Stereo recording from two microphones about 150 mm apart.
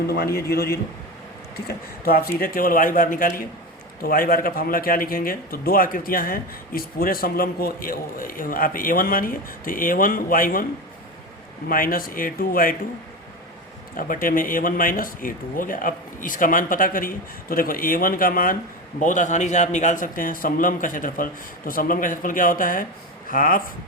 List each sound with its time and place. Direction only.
0.1 s a man's voice: 90° left; by 3.4 s 65° left (ahead or behind)
4.0 s speech: 75° left (ahead or behind)
11.7 s speech: 70° left (ahead or behind)
13.9 s speech: 70° left (ahead or behind)
18.9 s a man's voice: 55° left (ahead or behind)